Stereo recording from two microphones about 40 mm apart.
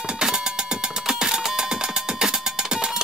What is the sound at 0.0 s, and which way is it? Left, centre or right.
Music, centre.